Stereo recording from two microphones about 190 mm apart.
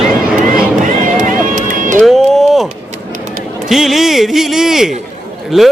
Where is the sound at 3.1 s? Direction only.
45° right (ahead or behind).